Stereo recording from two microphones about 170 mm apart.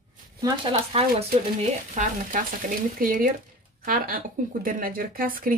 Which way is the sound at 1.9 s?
50° right (ahead or behind).